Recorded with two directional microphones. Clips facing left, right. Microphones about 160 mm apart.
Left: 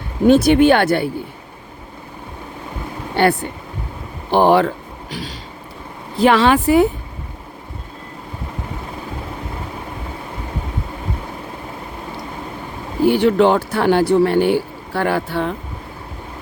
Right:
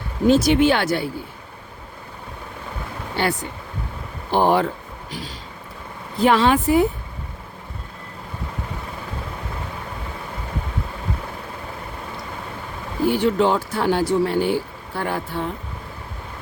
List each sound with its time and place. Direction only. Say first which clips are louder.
0.3 s speech: left 5 dB; 60° left (ahead or behind)
3.2 s speech: left 7 dB; 60° left (ahead or behind)
4.3 s speech: left 5 dB; 75° left (ahead or behind)
6.1 s speech: left 3 dB; 85° left
13.1 s speech: left 5 dB; 70° left (ahead or behind)